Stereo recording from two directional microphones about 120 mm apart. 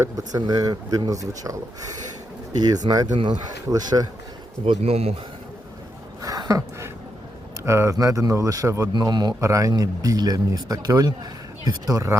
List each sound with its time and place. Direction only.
0.0 s speech: 30° right (ahead or behind)
2.8 s speech: 35° right (ahead or behind)
4.6 s speech: 50° right (ahead or behind)
6.2 s a sound: 30° right (ahead or behind)
7.6 s speech: 25° right (ahead or behind)
8.9 s speech: 35° right (ahead or behind)